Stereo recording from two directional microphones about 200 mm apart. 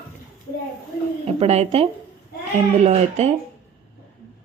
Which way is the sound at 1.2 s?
30° right (ahead or behind).